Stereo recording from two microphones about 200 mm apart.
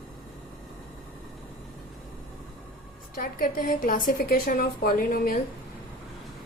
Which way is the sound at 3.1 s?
45° left (ahead or behind).